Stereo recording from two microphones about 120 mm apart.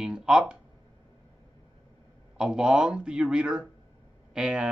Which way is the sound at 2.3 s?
5° right (ahead or behind).